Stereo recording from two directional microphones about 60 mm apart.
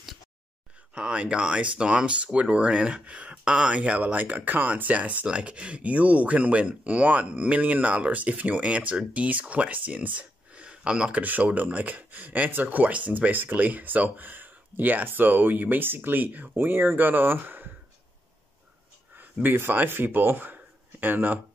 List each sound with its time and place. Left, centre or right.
0.9 s speech: centre; by 17.6 s right
19.4 s speech: right